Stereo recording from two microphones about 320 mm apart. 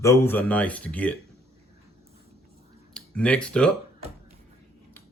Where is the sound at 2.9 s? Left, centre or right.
Centre.